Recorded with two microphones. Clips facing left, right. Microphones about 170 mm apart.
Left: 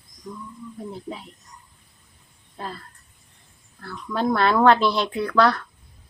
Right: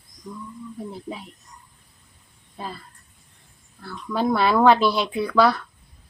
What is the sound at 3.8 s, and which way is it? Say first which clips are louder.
Speech: right 1 dB; 5° right (ahead or behind).